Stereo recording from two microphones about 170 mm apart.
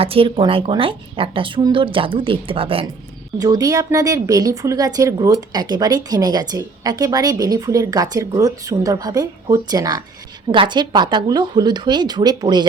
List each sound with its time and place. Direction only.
0.0 s a woman's voice: 35° right (ahead or behind)
3.3 s speech: 20° right (ahead or behind)